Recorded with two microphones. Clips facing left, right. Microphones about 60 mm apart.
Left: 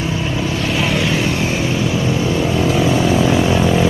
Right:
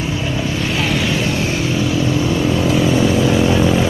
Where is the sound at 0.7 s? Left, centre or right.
Centre.